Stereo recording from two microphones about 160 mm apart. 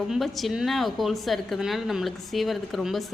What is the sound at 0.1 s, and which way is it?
A woman's voice, centre (ahead or behind).